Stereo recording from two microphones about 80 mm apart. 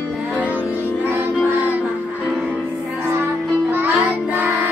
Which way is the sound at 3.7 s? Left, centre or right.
Right.